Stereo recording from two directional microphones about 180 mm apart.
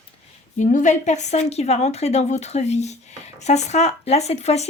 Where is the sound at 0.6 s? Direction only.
45° left (ahead or behind).